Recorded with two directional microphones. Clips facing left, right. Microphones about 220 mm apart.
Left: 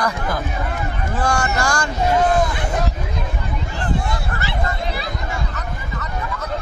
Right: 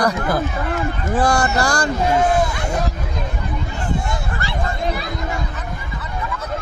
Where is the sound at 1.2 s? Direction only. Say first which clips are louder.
Right 3 dB; 35° right (ahead or behind).